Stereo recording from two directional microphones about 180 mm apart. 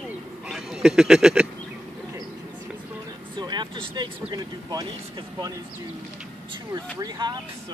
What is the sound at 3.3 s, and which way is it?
Speech, 25° right (ahead or behind).